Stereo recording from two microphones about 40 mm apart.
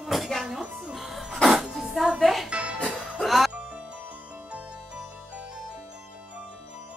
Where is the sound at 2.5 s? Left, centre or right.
Right.